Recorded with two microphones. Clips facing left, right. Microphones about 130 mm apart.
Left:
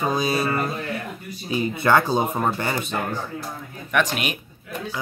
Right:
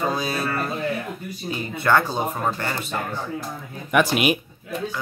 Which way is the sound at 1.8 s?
10° left (ahead or behind).